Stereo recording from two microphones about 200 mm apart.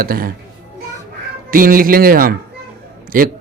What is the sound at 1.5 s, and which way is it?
Speech, 45° right (ahead or behind).